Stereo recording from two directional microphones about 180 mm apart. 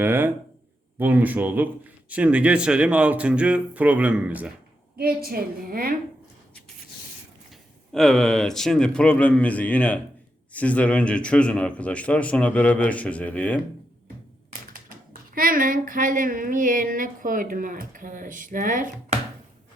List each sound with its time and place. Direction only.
0.0 s speech: 10° right (ahead or behind)
4.9 s a woman's voice: 55° right (ahead or behind)
7.5 s a man's voice: centre (ahead or behind)
15.4 s a sound: 50° right (ahead or behind)